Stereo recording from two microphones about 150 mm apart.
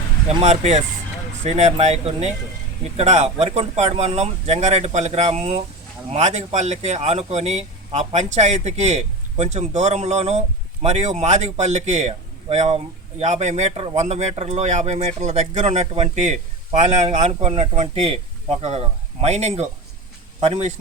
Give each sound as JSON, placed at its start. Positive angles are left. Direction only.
{"t": 0.4, "sound": "a man's voice", "side_deg": -45}